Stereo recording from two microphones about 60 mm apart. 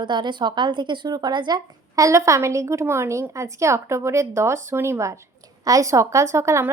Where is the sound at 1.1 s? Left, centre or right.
Right.